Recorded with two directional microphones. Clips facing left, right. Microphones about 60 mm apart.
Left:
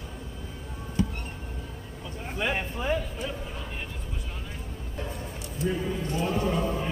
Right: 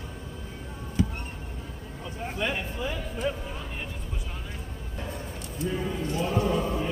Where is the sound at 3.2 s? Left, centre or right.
Centre.